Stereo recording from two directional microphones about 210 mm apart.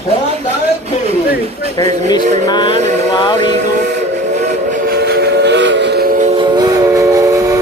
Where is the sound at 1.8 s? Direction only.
20° left (ahead or behind).